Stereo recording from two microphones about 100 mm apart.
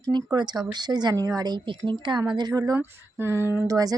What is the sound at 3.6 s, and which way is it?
Speech, 35° right (ahead or behind).